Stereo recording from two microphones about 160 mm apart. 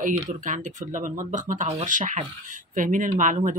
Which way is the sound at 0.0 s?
50° right (ahead or behind).